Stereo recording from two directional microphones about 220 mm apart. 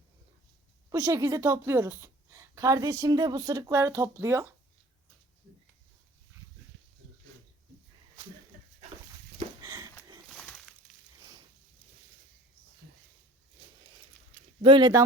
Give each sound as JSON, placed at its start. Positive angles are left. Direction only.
{"t": 0.9, "sound": "a woman's voice", "side_deg": -15}
{"t": 9.6, "sound": "sniff", "side_deg": -15}
{"t": 10.2, "sound": "a sound", "side_deg": 0}
{"t": 14.6, "sound": "speech", "side_deg": -20}